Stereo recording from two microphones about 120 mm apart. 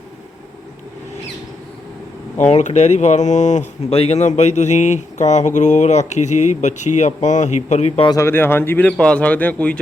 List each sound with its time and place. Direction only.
2.4 s speech: 75° left (ahead or behind)
8.2 s speech: 20° left (ahead or behind)